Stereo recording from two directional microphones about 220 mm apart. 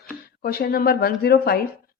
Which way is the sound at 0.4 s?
45° left (ahead or behind).